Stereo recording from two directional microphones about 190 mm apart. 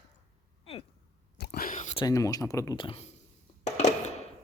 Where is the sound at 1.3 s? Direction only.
55° left (ahead or behind); by 2.0 s 35° left (ahead or behind).